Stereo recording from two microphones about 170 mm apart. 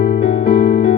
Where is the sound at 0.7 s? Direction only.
80° left.